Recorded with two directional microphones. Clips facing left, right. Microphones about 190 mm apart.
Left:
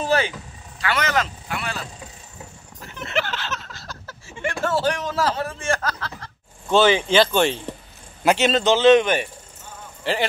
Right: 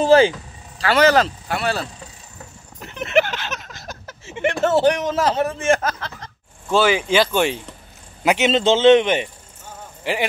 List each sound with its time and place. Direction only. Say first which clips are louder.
0.0 s speech: right 9 dB; 30° right (ahead or behind)
2.8 s a sound: right 8 dB; 20° right (ahead or behind)
6.7 s a man's voice: even; 5° right (ahead or behind)